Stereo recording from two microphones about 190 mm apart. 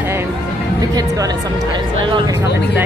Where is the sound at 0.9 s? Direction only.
20° right (ahead or behind).